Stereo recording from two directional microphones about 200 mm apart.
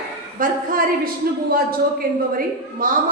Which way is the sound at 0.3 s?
45° right (ahead or behind).